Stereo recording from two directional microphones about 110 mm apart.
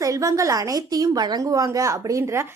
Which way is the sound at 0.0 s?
30° right (ahead or behind).